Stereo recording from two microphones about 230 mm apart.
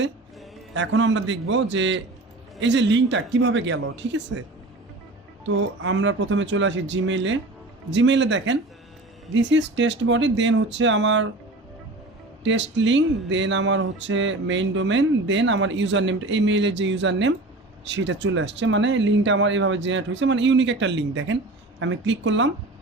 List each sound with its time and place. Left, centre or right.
0.7 s speech: right
5.5 s speech: right
12.4 s speech: right